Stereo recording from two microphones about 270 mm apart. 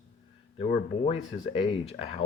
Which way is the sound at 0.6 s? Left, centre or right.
Left.